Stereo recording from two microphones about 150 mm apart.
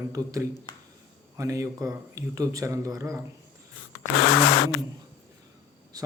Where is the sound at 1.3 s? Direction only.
20° right (ahead or behind).